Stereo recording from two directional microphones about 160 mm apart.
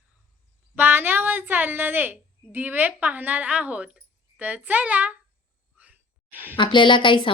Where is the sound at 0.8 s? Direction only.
10° right (ahead or behind).